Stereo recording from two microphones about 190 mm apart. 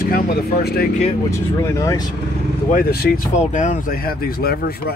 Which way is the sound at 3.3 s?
40° left (ahead or behind).